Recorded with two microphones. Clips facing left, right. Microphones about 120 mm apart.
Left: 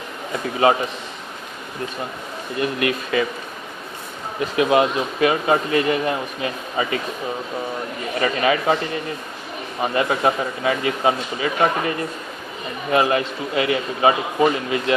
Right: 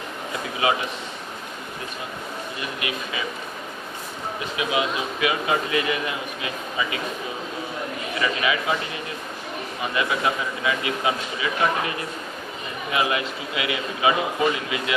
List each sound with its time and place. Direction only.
2.6 s speech: 55° left (ahead or behind)
4.4 s speech: 50° left (ahead or behind)
8.2 s speech: 40° left (ahead or behind)
9.8 s speech: 35° left (ahead or behind)